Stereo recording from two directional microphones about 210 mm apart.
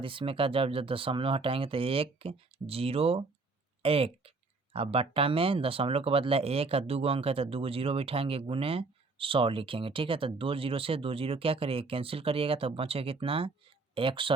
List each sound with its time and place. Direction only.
0.0 s speech: 25° right (ahead or behind)